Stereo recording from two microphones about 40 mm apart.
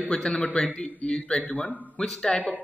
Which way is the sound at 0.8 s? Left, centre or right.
Left.